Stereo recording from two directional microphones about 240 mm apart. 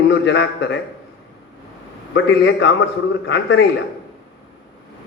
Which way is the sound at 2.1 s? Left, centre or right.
Left.